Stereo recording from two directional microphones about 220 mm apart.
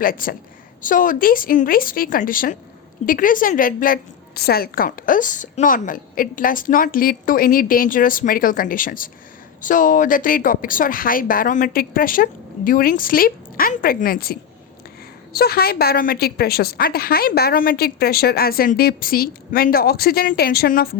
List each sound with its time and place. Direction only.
0.0 s a woman's voice: 40° left (ahead or behind)